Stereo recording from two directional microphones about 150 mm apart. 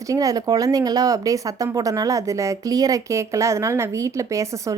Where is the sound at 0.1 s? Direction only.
25° right (ahead or behind).